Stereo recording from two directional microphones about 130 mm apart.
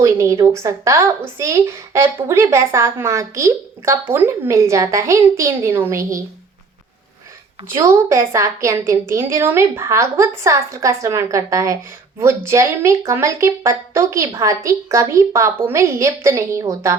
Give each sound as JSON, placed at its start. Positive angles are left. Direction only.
{"t": 0.0, "sound": "a woman's voice", "side_deg": -20}
{"t": 7.7, "sound": "a woman's voice", "side_deg": -20}